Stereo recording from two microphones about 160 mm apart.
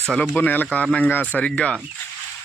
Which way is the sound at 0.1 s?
10° left (ahead or behind).